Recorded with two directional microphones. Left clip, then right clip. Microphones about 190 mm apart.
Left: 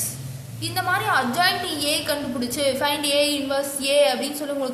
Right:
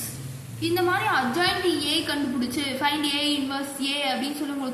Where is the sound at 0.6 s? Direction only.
60° left (ahead or behind).